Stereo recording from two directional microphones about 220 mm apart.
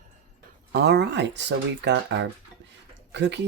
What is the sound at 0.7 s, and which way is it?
Speech, 50° right (ahead or behind).